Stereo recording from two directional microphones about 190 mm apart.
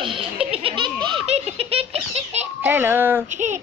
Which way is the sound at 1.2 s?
35° right (ahead or behind).